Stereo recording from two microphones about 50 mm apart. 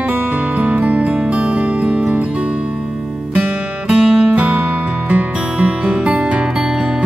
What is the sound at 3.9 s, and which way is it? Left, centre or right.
Music, centre.